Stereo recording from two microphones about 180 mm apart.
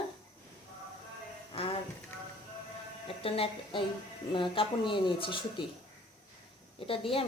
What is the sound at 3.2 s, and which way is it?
Speech, 30° left (ahead or behind).